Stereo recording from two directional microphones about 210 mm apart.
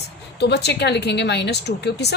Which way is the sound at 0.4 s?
55° left (ahead or behind).